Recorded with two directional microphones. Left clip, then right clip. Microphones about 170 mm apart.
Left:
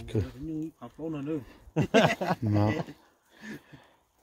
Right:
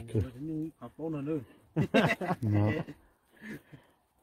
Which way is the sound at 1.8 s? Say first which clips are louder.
Left 4 dB; 60° left (ahead or behind).